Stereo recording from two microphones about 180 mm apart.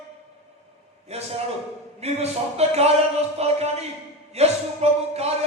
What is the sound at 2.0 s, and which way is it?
Speech, 35° right (ahead or behind).